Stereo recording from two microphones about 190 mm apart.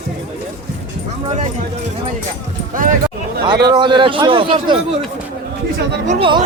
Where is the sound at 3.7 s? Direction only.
25° right (ahead or behind).